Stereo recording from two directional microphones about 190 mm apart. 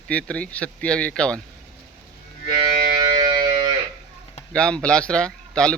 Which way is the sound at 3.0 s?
25° right (ahead or behind).